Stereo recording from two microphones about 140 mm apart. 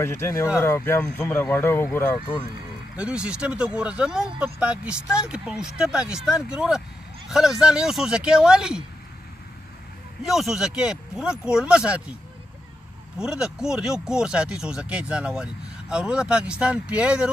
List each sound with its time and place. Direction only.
0.0 s speech: 20° left (ahead or behind)
3.0 s speech: 5° right (ahead or behind)
10.2 s speech: 5° right (ahead or behind)
13.2 s speech: 5° right (ahead or behind)